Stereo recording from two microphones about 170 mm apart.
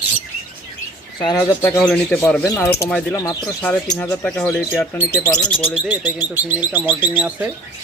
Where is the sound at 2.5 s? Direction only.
15° left (ahead or behind).